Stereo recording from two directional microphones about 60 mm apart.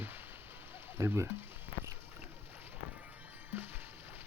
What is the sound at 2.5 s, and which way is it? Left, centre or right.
Music, right.